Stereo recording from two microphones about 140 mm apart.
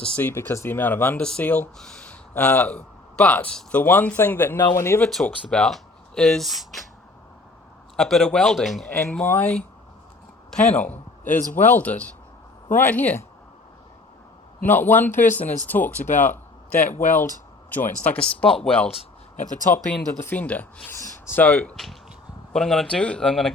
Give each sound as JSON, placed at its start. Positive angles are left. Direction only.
{"t": 0.0, "sound": "a man's voice", "side_deg": 10}
{"t": 4.5, "sound": "speech", "side_deg": 25}
{"t": 5.0, "sound": "speech", "side_deg": 5}
{"t": 7.9, "sound": "speech", "side_deg": 0}
{"t": 8.9, "sound": "a man's voice", "side_deg": 15}
{"t": 14.6, "sound": "a man's voice", "side_deg": 15}
{"t": 16.2, "sound": "a sound", "side_deg": 10}
{"t": 16.8, "sound": "speech", "side_deg": 60}
{"t": 18.0, "sound": "a man's voice", "side_deg": 10}
{"t": 18.9, "sound": "a sound", "side_deg": 45}
{"t": 19.5, "sound": "speech", "side_deg": 65}
{"t": 19.9, "sound": "a man's voice", "side_deg": 10}